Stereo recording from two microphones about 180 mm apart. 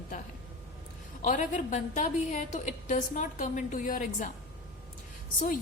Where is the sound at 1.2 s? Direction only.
45° left (ahead or behind).